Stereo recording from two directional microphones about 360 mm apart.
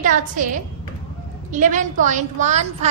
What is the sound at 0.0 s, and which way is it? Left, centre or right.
Speech, right.